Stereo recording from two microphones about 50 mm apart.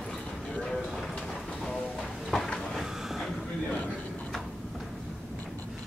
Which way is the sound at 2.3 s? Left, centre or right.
Centre.